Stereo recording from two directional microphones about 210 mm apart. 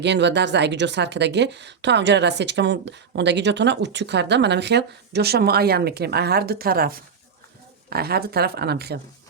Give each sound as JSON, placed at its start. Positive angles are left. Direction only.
{"t": 0.0, "sound": "a woman's voice", "side_deg": -55}